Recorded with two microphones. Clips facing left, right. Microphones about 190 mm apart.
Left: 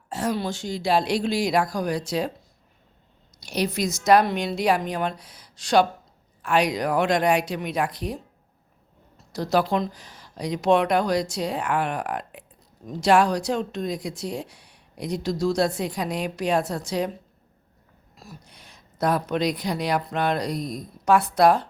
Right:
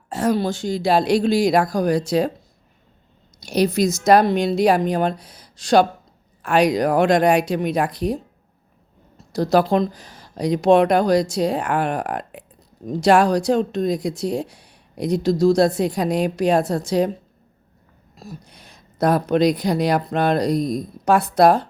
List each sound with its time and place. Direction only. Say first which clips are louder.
0.1 s a woman's voice: right 6 dB; 45° right (ahead or behind)
3.4 s a woman's voice: right 7 dB; 40° right (ahead or behind)
9.3 s a woman's voice: right 5 dB; 40° right (ahead or behind)
18.2 s a woman's voice: right 7 dB; 40° right (ahead or behind)